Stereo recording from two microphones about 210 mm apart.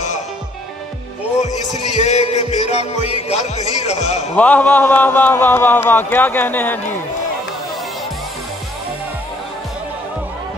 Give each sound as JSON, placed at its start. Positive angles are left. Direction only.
{"t": 1.4, "sound": "music", "side_deg": 35}
{"t": 4.4, "sound": "speech", "side_deg": 10}